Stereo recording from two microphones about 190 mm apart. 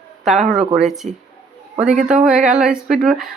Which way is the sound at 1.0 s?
40° right (ahead or behind).